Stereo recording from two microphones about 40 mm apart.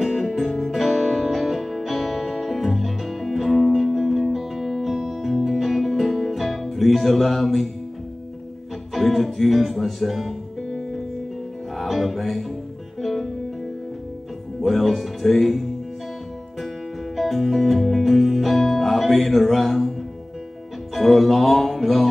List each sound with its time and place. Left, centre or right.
0.0 s music: centre
8.9 s music: centre
14.6 s speech: centre
17.2 s music: centre
20.9 s music: centre